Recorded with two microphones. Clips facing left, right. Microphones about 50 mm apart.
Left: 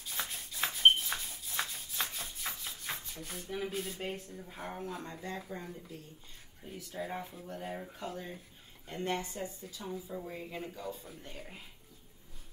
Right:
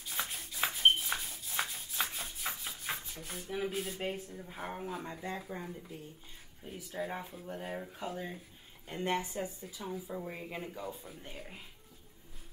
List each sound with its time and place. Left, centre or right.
0.0 s rub: centre
5.5 s speech: centre
8.8 s speech: right
11.1 s speech: centre